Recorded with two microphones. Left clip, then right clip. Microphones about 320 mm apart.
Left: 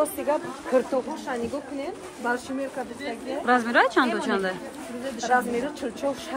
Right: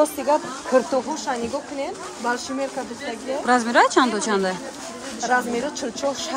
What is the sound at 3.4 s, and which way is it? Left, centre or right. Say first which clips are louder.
A woman's voice: right 3 dB; centre.